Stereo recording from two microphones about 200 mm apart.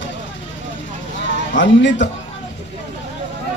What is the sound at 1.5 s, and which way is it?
Speech, 65° left (ahead or behind).